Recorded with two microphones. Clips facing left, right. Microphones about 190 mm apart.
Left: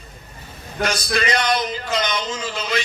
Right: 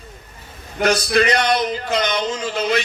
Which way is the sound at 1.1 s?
60° right (ahead or behind).